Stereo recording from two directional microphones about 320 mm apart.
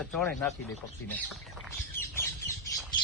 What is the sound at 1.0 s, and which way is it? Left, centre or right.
Bird, centre.